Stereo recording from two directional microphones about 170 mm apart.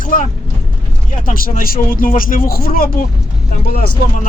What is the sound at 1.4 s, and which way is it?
A man's voice, 55° left (ahead or behind).